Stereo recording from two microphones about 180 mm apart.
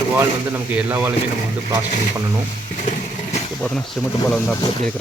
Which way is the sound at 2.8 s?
40° left (ahead or behind).